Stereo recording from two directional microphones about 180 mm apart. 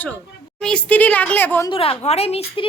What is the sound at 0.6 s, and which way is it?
A woman's voice, 5° left (ahead or behind).